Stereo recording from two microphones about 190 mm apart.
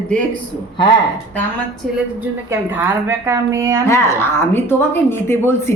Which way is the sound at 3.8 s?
15° left (ahead or behind).